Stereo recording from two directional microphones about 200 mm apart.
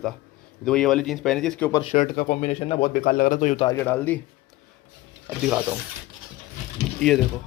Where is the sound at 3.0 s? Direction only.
45° left (ahead or behind).